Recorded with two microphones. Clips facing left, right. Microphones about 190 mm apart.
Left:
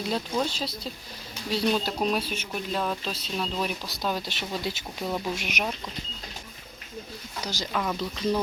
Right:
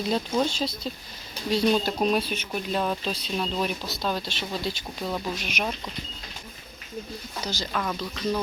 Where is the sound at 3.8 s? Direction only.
10° left (ahead or behind).